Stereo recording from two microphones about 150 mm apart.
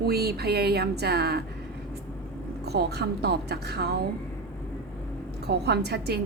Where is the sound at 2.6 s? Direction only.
90° right.